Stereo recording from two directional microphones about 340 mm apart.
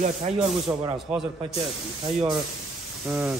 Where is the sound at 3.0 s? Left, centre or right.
Centre.